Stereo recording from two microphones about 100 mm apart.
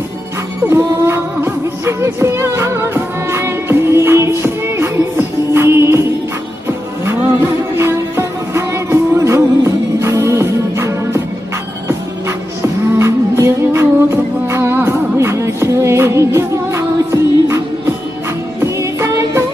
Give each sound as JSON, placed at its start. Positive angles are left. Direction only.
{"t": 0.7, "sound": "music", "side_deg": -25}
{"t": 7.7, "sound": "music", "side_deg": -25}
{"t": 12.6, "sound": "music", "side_deg": -30}
{"t": 18.6, "sound": "music", "side_deg": -30}